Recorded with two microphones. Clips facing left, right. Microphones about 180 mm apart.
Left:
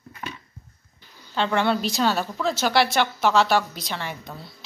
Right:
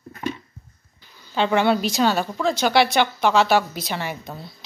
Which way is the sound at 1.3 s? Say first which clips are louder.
Right 3 dB; 5° right (ahead or behind).